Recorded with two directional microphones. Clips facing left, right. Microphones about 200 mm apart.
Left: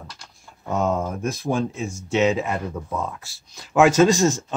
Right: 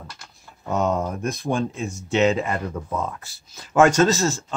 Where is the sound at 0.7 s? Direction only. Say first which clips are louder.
Even; centre (ahead or behind).